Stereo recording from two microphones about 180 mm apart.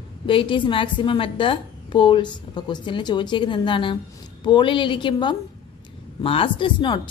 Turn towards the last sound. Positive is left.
turn(degrees=25)  # may be behind; listen again after turning